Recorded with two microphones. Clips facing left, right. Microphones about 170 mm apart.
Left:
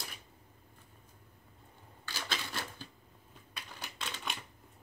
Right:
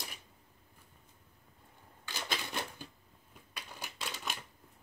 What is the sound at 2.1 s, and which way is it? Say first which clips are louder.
Typewriter: right 1 dB; 15° right (ahead or behind).